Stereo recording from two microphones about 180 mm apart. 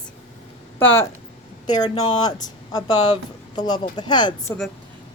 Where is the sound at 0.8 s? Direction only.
10° left (ahead or behind).